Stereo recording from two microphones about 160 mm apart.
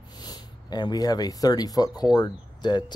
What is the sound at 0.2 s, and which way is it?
Speech, 25° left (ahead or behind).